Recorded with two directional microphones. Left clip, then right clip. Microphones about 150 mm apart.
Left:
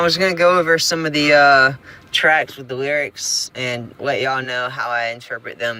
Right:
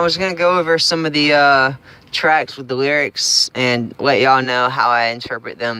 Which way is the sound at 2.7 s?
50° right (ahead or behind).